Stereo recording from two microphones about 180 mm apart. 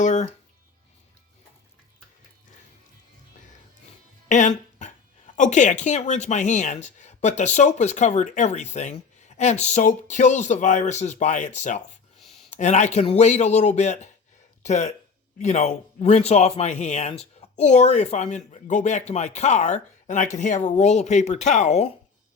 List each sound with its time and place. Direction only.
0.0 s music: 45° left (ahead or behind)
4.3 s speech: 40° left (ahead or behind)
12.2 s a sound: centre (ahead or behind)
12.5 s speech: 40° left (ahead or behind)